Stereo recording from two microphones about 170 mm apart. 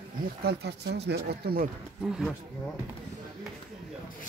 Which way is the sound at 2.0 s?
5° right (ahead or behind).